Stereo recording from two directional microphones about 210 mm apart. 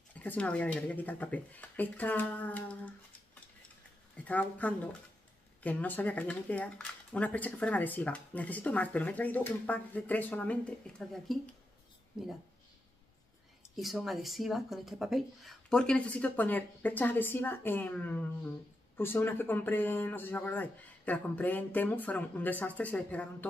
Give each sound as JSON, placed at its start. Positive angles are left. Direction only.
{"t": 0.1, "sound": "speech", "side_deg": 5}
{"t": 4.2, "sound": "speech", "side_deg": 5}
{"t": 13.7, "sound": "speech", "side_deg": 0}